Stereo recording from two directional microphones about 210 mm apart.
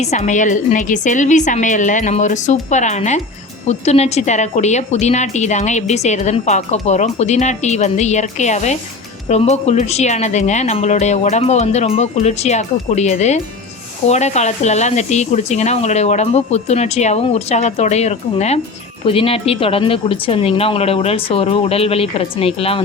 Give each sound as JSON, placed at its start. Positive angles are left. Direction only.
{"t": 0.0, "sound": "a woman's voice", "side_deg": 35}